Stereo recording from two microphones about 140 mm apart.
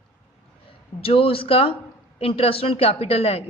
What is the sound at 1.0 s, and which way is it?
Speech, 40° left (ahead or behind).